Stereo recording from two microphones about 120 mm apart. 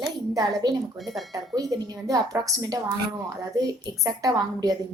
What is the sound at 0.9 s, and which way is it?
Speech, centre (ahead or behind).